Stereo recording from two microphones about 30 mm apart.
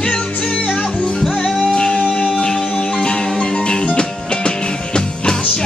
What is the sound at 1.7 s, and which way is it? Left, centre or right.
Music, left.